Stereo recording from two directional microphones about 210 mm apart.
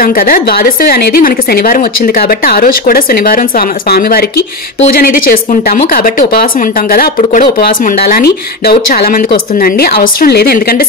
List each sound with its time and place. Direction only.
0.0 s speech: 45° left (ahead or behind)